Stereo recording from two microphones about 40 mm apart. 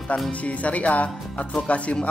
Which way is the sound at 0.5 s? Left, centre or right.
Left.